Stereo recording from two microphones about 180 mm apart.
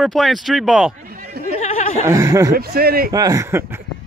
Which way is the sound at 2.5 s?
60° right (ahead or behind).